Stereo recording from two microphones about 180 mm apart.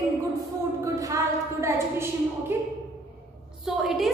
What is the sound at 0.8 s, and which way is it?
A woman's voice, 15° right (ahead or behind).